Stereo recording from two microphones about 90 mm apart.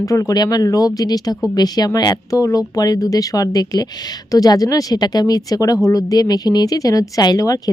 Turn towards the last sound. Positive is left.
turn(degrees=40)  # may be behind; listen again after turning